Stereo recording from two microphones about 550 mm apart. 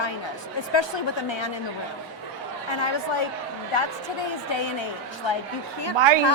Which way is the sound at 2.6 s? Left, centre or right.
Left.